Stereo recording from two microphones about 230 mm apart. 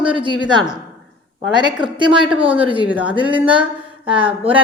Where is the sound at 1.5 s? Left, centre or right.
Centre.